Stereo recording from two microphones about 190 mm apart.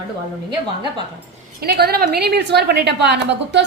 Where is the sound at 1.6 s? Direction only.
55° right (ahead or behind).